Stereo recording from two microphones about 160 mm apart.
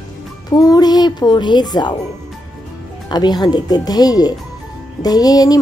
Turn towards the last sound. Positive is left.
turn(degrees=25)  # may be behind; listen again after turning